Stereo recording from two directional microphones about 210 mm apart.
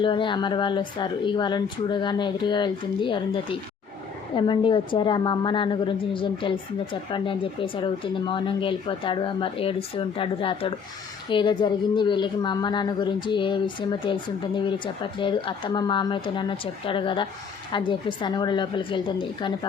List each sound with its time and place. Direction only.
0.0 s speech: 25° left (ahead or behind)